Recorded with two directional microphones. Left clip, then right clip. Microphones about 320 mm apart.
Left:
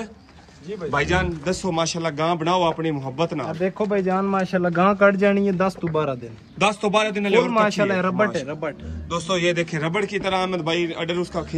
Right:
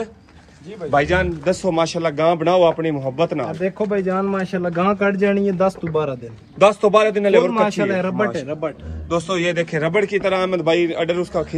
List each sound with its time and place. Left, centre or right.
0.9 s a man's voice: centre
9.1 s a man's voice: centre